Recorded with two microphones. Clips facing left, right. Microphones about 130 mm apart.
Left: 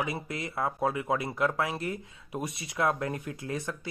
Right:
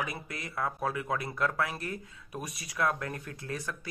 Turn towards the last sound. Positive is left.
turn(degrees=20)  # may be behind; listen again after turning